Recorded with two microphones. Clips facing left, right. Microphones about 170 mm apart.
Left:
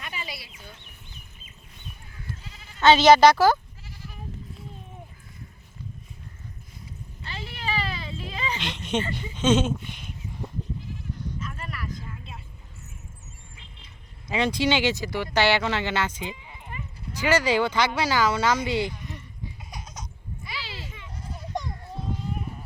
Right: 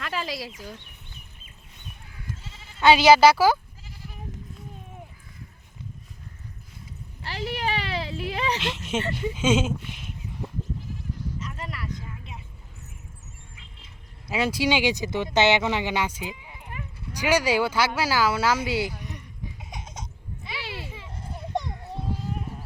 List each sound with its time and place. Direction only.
0.0 s speech: 90° right
2.5 s bleat: 30° right (ahead or behind)
2.8 s speech: 10° right (ahead or behind)
7.2 s a sound: 75° right (ahead or behind)
8.6 s speech: 5° right (ahead or behind)
11.3 s a sound: 25° right (ahead or behind)
14.3 s speech: 5° right (ahead or behind)
19.7 s a sound: 25° right (ahead or behind)
20.8 s goat: 30° right (ahead or behind)